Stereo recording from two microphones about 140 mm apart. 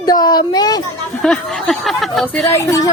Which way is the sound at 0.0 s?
30° left (ahead or behind).